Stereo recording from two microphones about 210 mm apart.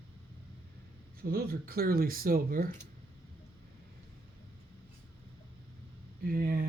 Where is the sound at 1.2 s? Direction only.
45° right (ahead or behind).